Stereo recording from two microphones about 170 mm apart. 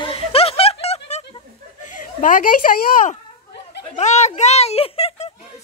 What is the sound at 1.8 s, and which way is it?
Speech, 50° left (ahead or behind).